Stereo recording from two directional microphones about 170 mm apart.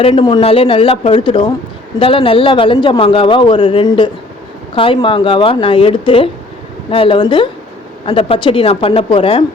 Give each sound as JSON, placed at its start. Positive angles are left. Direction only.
{"t": 0.0, "sound": "a man's voice", "side_deg": 35}